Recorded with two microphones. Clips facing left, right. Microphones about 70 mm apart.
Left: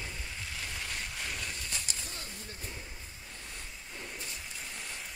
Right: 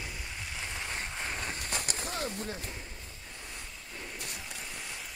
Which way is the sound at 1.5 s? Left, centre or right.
Right.